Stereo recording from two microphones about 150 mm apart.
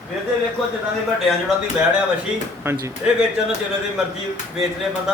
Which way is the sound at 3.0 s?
5° right (ahead or behind).